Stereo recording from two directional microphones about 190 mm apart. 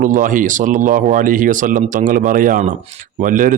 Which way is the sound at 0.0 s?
45° right (ahead or behind).